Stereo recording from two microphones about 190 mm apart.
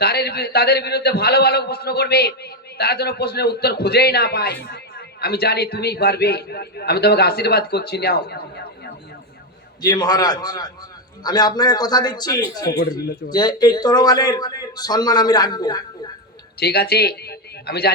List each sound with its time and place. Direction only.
0.0 s a man's voice: 55° left (ahead or behind)
9.8 s a man's voice: 20° left (ahead or behind)
16.6 s a man's voice: 60° left (ahead or behind)